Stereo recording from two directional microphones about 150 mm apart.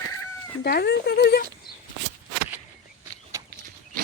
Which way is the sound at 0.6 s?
90° left.